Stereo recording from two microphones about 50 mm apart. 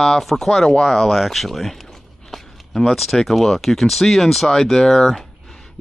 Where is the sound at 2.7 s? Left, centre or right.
Centre.